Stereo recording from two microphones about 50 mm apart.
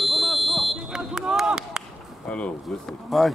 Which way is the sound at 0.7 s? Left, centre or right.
Centre.